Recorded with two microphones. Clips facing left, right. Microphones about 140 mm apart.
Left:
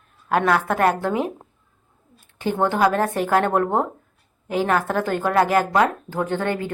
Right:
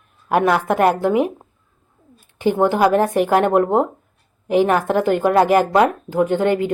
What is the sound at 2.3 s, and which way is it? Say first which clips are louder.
A woman's voice: right 5 dB; 15° right (ahead or behind).